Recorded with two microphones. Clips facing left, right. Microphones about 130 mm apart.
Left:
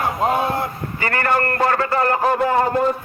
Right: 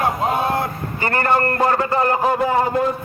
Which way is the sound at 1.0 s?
25° right (ahead or behind).